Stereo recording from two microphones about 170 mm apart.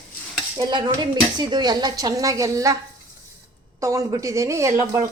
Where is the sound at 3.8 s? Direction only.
20° right (ahead or behind).